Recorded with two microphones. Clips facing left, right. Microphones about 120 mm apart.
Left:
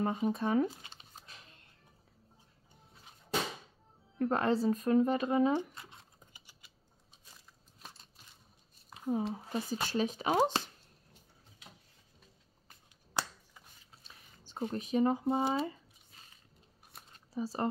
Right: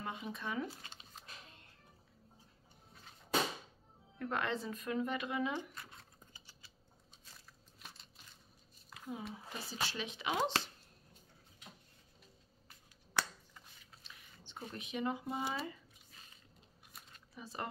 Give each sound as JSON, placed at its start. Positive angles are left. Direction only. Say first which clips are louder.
{"t": 0.0, "sound": "speech", "louder": "left 11 dB", "side_deg": 40}
{"t": 4.2, "sound": "speech", "louder": "left 8 dB", "side_deg": 35}
{"t": 5.8, "sound": "a sound", "louder": "left 1 dB", "side_deg": 20}
{"t": 9.0, "sound": "speech", "louder": "left 11 dB", "side_deg": 40}
{"t": 14.0, "sound": "speech", "louder": "even", "side_deg": 40}
{"t": 16.9, "sound": "a sound", "louder": "left 14 dB", "side_deg": 35}